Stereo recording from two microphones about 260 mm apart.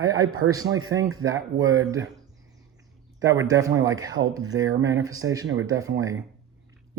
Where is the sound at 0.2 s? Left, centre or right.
Right.